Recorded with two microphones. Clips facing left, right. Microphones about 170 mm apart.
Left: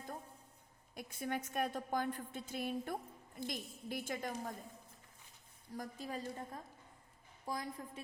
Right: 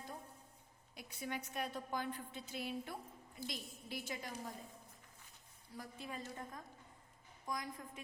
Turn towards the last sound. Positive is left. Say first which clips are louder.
# left 2 dB
turn(degrees=30)  # may be behind; listen again after turning